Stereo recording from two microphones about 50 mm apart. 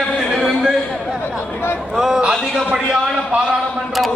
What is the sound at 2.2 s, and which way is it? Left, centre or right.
Speech, centre.